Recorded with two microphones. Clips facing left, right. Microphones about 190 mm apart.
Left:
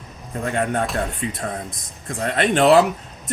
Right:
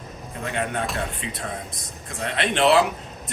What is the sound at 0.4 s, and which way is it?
Speech, 45° left (ahead or behind).